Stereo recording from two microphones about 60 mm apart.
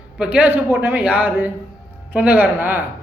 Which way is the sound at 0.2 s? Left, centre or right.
Right.